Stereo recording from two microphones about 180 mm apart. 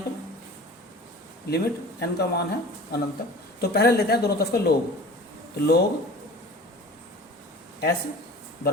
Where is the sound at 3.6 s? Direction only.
60° left (ahead or behind).